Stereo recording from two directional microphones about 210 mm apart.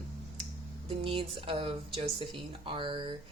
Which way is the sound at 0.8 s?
25° right (ahead or behind).